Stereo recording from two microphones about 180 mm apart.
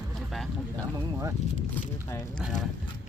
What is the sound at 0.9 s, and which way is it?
Speech, 15° right (ahead or behind).